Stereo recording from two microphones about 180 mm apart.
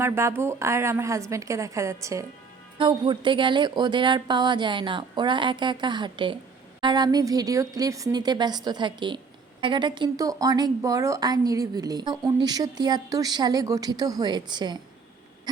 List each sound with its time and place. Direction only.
0.0 s a woman's voice: 15° right (ahead or behind)